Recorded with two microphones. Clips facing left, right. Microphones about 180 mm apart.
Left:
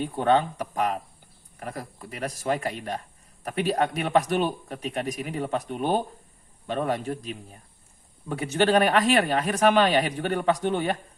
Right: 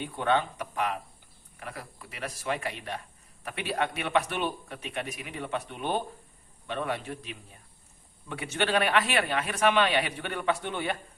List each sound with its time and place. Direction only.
0.0 s speech: 40° left (ahead or behind)